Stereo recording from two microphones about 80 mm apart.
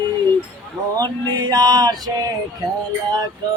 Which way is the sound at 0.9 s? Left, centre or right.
Right.